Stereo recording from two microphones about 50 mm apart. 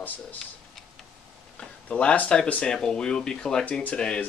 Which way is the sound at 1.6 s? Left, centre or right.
Centre.